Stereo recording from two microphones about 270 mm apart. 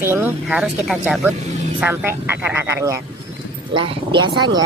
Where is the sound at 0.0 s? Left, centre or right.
Centre.